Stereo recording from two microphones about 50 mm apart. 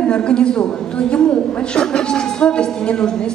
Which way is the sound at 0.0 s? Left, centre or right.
Centre.